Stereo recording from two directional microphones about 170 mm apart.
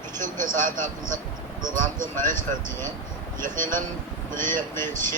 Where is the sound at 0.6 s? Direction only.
50° right (ahead or behind).